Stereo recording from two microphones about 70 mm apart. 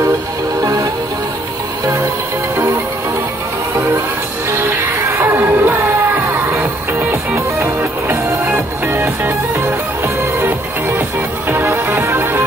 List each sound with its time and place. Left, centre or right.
4.5 s music: right
7.3 s music: right